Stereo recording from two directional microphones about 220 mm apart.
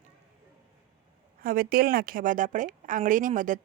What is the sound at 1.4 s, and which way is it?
A woman's voice, 40° right (ahead or behind).